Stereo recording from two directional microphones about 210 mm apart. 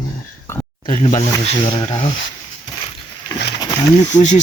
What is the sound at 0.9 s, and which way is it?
Speech, 35° left (ahead or behind).